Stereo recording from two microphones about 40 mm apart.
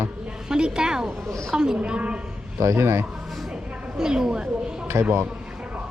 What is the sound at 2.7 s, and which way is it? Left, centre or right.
Speech, right.